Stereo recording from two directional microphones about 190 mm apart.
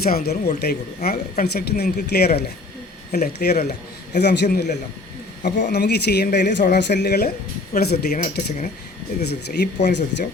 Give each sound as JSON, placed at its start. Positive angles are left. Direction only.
{"t": 0.0, "sound": "speech", "side_deg": 55}
{"t": 9.2, "sound": "speech", "side_deg": 60}